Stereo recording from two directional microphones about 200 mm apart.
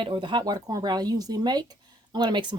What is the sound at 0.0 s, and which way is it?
Speech, 25° right (ahead or behind).